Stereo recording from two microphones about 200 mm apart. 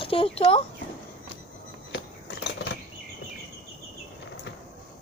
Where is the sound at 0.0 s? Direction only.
25° left (ahead or behind).